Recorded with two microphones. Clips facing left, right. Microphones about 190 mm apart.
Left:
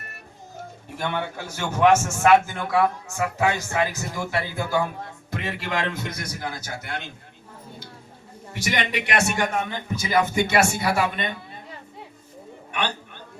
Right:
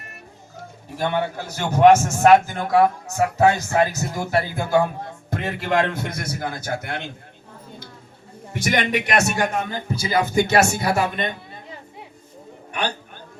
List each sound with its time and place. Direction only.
0.9 s a man's voice: 35° right (ahead or behind); by 7.1 s 55° right (ahead or behind)
8.6 s a man's voice: 45° right (ahead or behind)